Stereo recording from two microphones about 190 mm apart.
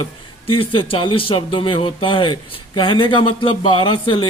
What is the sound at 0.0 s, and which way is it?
A man's voice, 25° left (ahead or behind).